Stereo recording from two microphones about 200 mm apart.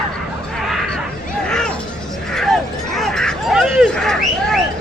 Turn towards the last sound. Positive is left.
turn(degrees=0)  # may be behind; listen again after turning